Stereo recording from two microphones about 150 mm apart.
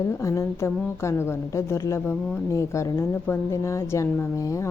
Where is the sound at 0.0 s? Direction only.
20° left (ahead or behind).